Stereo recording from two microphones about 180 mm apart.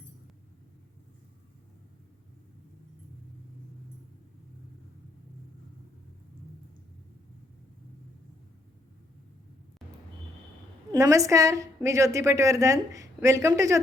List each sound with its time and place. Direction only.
10.9 s a woman's voice: 20° right (ahead or behind)